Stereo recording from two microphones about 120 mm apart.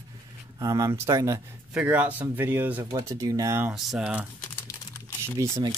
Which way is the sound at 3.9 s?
5° right (ahead or behind).